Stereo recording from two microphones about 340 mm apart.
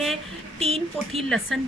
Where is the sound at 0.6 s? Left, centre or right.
Centre.